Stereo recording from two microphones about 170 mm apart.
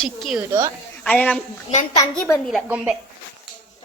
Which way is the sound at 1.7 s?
40° left (ahead or behind).